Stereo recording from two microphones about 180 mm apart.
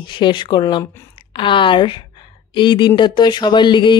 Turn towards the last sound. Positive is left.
turn(degrees=25)  # may be behind; listen again after turning